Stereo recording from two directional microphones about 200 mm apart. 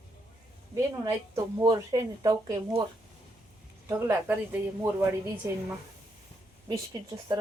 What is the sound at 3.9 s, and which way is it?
Speech, 10° right (ahead or behind).